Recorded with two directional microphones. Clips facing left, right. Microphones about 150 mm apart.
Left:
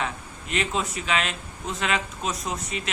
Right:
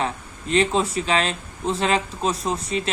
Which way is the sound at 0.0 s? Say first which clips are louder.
Right 4 dB; 30° right (ahead or behind).